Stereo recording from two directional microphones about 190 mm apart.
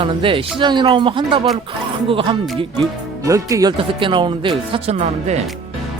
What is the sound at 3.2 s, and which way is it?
Speech, 15° right (ahead or behind).